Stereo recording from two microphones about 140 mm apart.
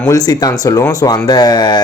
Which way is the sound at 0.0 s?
25° left (ahead or behind).